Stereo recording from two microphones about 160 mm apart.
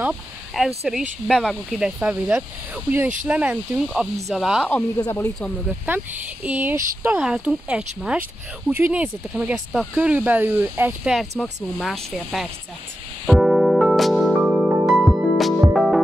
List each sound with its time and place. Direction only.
0.0 s speech: 5° right (ahead or behind)
4.6 s speech: 10° left (ahead or behind)
5.0 s speech: 20° left (ahead or behind)
5.9 s speech: 10° right (ahead or behind)
11.1 s speech: centre (ahead or behind)
13.3 s music: centre (ahead or behind)